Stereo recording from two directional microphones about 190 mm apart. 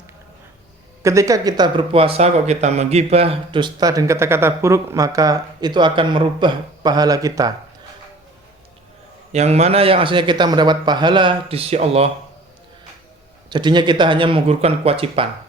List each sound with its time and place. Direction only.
1.0 s speech: 15° right (ahead or behind)
9.3 s speech: 35° right (ahead or behind)
13.5 s speech: 25° right (ahead or behind)